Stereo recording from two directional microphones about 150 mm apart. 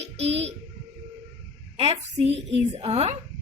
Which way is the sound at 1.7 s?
45° right (ahead or behind).